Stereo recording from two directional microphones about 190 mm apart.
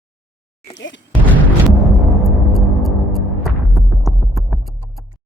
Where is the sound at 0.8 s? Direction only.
70° left (ahead or behind).